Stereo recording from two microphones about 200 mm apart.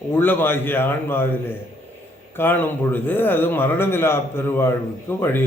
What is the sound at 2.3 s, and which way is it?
A man's voice, 10° left (ahead or behind).